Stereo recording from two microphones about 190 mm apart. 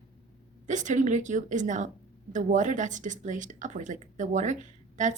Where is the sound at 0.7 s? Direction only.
40° right (ahead or behind).